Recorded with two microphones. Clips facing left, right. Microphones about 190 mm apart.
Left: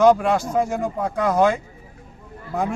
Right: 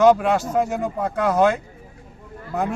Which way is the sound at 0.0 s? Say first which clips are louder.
Even; centre (ahead or behind).